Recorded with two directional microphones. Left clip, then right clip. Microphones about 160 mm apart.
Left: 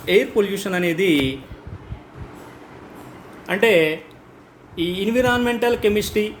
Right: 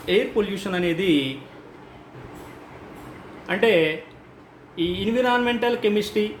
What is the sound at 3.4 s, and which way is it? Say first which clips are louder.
Speech: left 3 dB; 50° left (ahead or behind).